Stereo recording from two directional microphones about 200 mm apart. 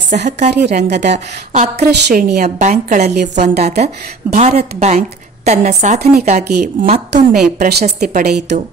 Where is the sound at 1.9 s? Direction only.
55° right (ahead or behind).